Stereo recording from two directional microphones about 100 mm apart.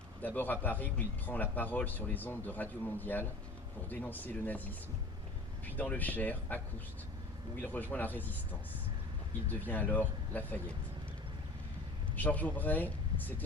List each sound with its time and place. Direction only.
0.2 s speech: 20° left (ahead or behind)
9.5 s speech: 20° left (ahead or behind)
12.1 s speech: 15° left (ahead or behind)